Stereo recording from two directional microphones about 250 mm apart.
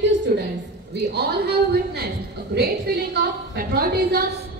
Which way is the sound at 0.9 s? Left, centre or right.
Right.